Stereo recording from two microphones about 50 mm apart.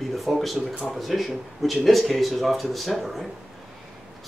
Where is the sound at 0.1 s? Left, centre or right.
Centre.